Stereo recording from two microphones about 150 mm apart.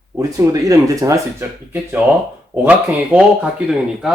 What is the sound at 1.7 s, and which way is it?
Speech, 10° right (ahead or behind).